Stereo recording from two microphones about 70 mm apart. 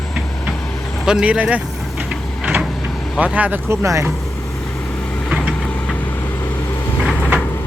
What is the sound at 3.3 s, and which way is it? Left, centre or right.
Speech, right.